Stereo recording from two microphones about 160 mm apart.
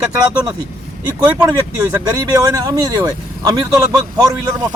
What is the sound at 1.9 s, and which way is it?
Speech, 20° right (ahead or behind).